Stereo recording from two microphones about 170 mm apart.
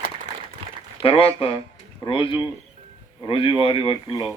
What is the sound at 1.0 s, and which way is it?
Speech, 35° left (ahead or behind).